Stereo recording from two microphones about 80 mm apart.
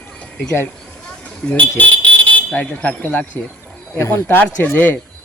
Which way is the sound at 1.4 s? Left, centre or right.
Centre.